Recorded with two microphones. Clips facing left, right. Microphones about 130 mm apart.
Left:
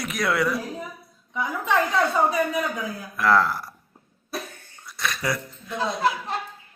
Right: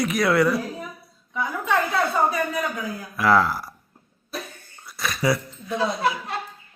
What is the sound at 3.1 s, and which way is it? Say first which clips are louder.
Speech: right 1 dB; 5° right (ahead or behind).